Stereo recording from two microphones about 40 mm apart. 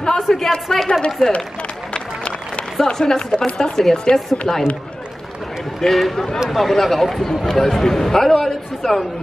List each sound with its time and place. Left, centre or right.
0.0 s a man's voice: centre
1.2 s speech: centre
2.0 s run: left
2.8 s a man's voice: centre
5.8 s a man's voice: centre